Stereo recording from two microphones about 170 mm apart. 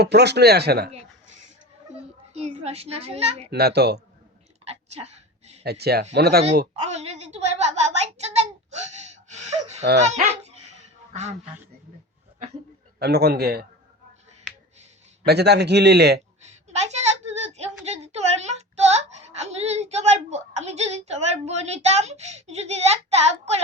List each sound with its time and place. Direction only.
0.0 s a man's voice: 75° right (ahead or behind)
2.3 s a child's voice: 40° right (ahead or behind)
3.5 s a man's voice: 75° right (ahead or behind)
4.7 s a sound: 40° right (ahead or behind)
5.6 s a man's voice: 70° right (ahead or behind)
6.8 s a sound: 40° right (ahead or behind)
10.0 s speech: 45° right (ahead or behind)
13.0 s a man's voice: 70° right (ahead or behind)
15.2 s a man's voice: 75° right (ahead or behind)
16.8 s a sound: 40° right (ahead or behind)
17.8 s a child's voice: 40° right (ahead or behind)